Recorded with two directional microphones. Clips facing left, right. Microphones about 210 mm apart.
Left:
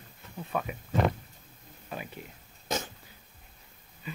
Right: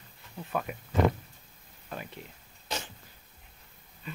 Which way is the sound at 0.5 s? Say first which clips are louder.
Even; centre (ahead or behind).